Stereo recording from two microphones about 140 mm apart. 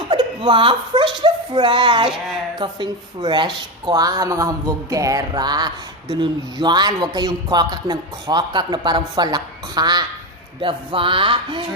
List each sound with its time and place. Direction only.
0.1 s a child's voice: 35° right (ahead or behind)